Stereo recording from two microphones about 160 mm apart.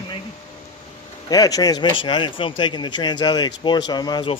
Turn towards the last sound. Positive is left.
turn(degrees=30)  # may be behind; listen again after turning